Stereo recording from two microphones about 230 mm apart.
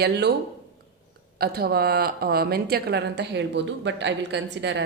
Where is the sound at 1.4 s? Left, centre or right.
Right.